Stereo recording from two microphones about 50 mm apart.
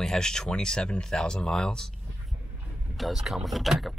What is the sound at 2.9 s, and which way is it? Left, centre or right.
Speech, centre.